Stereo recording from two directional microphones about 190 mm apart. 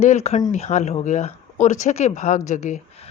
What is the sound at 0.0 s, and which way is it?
Speech, 35° left (ahead or behind).